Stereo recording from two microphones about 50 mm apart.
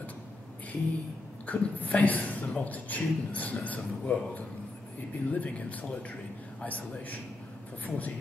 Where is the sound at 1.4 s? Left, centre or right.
Left.